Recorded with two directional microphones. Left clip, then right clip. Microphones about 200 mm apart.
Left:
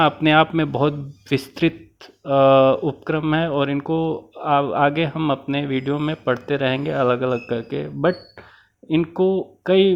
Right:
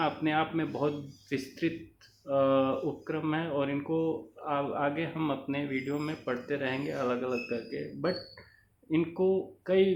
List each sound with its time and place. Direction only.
0.0 s speech: 50° left (ahead or behind)